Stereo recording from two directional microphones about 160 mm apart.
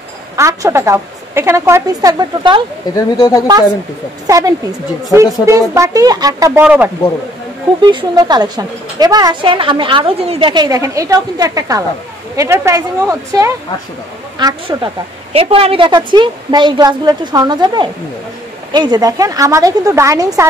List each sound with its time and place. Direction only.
0.4 s a woman's voice: 20° right (ahead or behind)
3.2 s a woman's voice: 25° left (ahead or behind)
4.3 s speech: 20° right (ahead or behind)
6.6 s a woman's voice: 10° right (ahead or behind)
7.8 s speech: 25° right (ahead or behind)
15.3 s speech: 35° right (ahead or behind); by 20.4 s 20° right (ahead or behind)